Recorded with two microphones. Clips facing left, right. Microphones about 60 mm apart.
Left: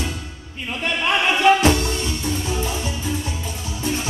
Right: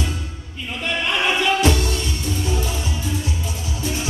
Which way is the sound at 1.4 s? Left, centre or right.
Left.